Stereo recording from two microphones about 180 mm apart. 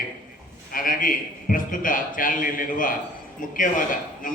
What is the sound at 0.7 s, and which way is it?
A man's voice, 50° left (ahead or behind).